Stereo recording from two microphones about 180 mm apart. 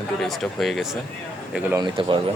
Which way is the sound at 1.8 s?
25° right (ahead or behind).